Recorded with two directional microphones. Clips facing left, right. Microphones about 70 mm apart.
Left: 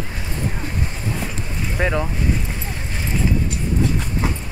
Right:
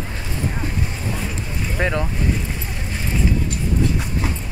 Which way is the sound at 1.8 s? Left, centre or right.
Centre.